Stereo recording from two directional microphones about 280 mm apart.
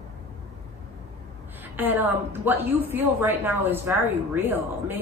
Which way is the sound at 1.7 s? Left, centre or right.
Centre.